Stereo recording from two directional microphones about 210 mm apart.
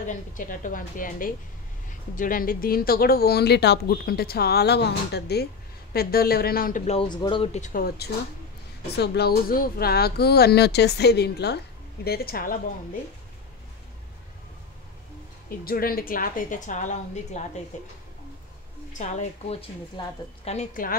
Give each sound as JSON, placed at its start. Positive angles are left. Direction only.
{"t": 0.0, "sound": "speech", "side_deg": 35}
{"t": 6.9, "sound": "speech", "side_deg": 25}
{"t": 7.6, "sound": "speech", "side_deg": 45}
{"t": 15.6, "sound": "speech", "side_deg": 45}
{"t": 18.9, "sound": "speech", "side_deg": 35}